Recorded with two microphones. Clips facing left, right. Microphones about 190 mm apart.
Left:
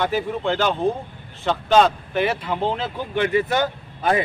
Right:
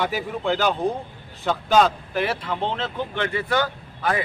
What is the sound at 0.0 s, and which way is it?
A man's voice, 5° right (ahead or behind).